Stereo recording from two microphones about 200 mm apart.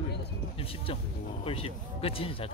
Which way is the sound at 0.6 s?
25° left (ahead or behind).